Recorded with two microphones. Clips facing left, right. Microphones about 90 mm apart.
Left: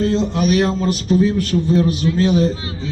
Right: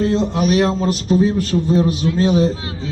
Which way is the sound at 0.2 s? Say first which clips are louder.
Right 1 dB; 35° right (ahead or behind).